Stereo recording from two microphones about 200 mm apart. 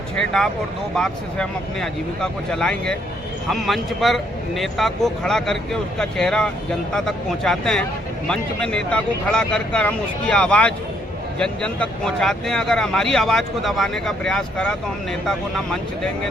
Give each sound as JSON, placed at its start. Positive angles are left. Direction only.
{"t": 0.2, "sound": "speech", "side_deg": 5}